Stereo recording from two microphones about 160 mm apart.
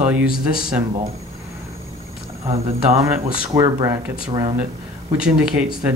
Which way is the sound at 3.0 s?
10° right (ahead or behind).